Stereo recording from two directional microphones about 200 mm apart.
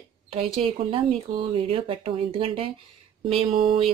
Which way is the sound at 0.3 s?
30° right (ahead or behind).